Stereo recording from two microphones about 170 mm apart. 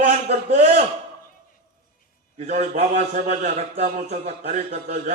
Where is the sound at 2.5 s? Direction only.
45° right (ahead or behind).